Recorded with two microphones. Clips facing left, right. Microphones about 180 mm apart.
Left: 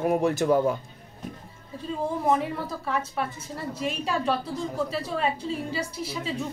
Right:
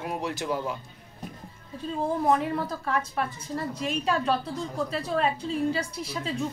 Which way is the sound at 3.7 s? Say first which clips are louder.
Even; 5° left (ahead or behind).